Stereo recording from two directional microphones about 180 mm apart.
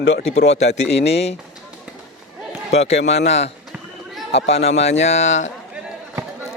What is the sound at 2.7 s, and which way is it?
A man's voice, 35° left (ahead or behind).